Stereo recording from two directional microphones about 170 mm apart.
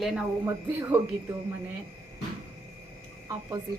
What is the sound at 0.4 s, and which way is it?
Speech, 15° right (ahead or behind).